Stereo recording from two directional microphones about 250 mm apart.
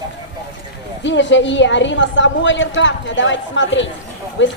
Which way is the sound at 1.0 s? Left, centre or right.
Left.